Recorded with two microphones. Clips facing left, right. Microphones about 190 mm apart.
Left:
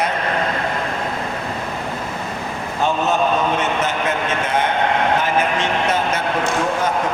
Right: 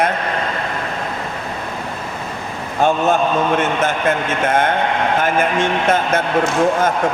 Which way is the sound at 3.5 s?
50° right (ahead or behind).